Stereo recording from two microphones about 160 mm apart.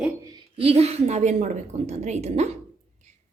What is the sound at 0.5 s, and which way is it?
A woman's voice, 40° right (ahead or behind).